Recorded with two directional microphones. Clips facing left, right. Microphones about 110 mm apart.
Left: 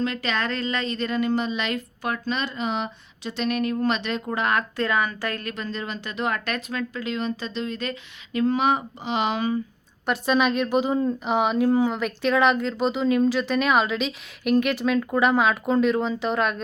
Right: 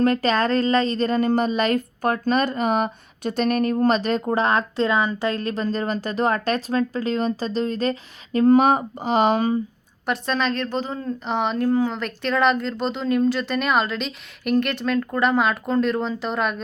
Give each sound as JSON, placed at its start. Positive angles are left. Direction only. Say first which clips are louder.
{"t": 0.0, "sound": "speech", "louder": "right 7 dB", "side_deg": -45}
{"t": 10.1, "sound": "a woman's voice", "louder": "left 2 dB", "side_deg": 10}